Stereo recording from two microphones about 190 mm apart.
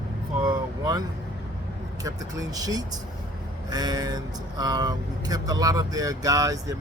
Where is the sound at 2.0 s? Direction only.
20° right (ahead or behind).